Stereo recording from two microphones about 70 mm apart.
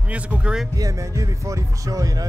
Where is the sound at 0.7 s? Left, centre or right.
Right.